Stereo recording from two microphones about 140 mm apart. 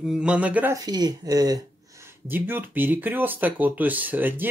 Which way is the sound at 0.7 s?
30° right (ahead or behind).